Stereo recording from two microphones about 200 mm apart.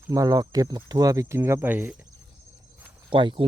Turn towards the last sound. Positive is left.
turn(degrees=-25)  # may be behind; listen again after turning